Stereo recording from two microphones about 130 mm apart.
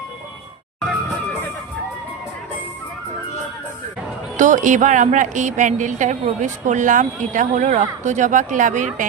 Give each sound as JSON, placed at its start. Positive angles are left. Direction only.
{"t": 4.4, "sound": "speech", "side_deg": -75}